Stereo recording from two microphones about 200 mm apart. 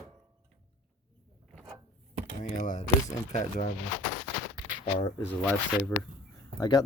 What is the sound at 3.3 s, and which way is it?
Speech, 40° left (ahead or behind).